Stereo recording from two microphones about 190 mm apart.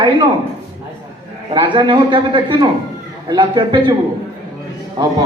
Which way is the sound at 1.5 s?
25° right (ahead or behind).